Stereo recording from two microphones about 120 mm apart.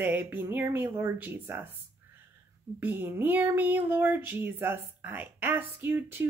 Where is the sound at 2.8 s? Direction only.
15° right (ahead or behind).